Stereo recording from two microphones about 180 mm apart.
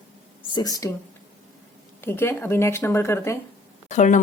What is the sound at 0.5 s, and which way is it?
Speech, 20° left (ahead or behind).